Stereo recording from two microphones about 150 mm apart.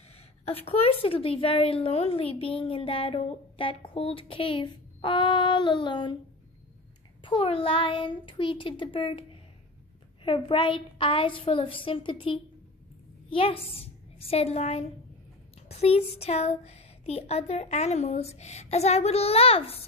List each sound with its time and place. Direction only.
0.5 s a woman's voice: 40° left (ahead or behind)
7.2 s a woman's voice: 40° left (ahead or behind)
10.2 s a woman's voice: 35° left (ahead or behind)